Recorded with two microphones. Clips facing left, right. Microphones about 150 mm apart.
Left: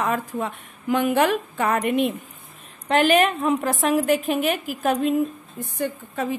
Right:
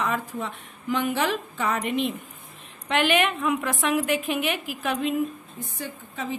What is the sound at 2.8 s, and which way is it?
A woman's voice, 40° left (ahead or behind).